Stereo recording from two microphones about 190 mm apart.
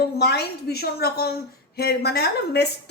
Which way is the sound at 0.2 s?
60° left (ahead or behind).